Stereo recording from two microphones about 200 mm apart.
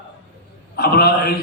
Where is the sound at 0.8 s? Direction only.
55° left (ahead or behind).